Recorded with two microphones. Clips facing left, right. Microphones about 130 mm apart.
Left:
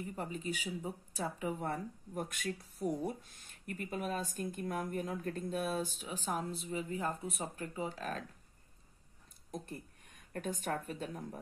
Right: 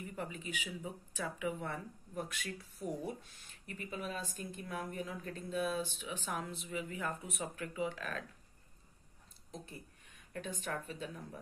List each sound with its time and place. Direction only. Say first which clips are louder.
0.1 s speech: left 2 dB; 35° left (ahead or behind)
9.5 s speech: left 5 dB; 50° left (ahead or behind)